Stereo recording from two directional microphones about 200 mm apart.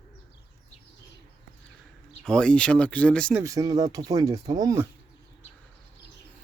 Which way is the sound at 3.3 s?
15° right (ahead or behind).